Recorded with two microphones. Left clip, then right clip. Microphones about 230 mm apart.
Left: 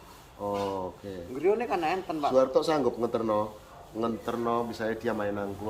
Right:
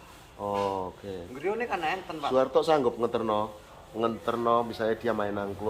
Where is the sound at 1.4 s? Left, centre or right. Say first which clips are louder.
Left 4 dB; left.